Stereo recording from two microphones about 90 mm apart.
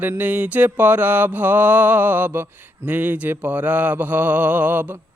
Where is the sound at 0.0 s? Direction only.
20° right (ahead or behind).